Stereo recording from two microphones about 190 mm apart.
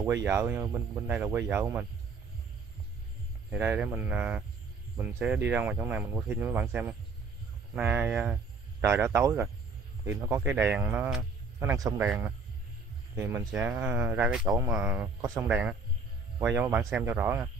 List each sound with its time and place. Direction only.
0.0 s speech: 15° right (ahead or behind)
3.4 s speech: 10° right (ahead or behind)
11.1 s a sound: 5° right (ahead or behind)
11.7 s speech: 15° right (ahead or behind)
13.1 s speech: 10° right (ahead or behind)
14.4 s speech: 15° right (ahead or behind)